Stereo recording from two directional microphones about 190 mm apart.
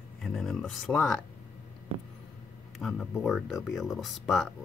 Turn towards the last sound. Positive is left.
turn(degrees=0)  # may be behind; listen again after turning